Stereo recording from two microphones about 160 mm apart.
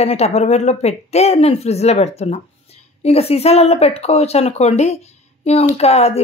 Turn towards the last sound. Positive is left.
turn(degrees=40)  # may be behind; listen again after turning